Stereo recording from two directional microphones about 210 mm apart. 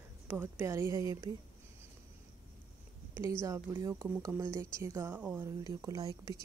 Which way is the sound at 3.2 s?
15° right (ahead or behind).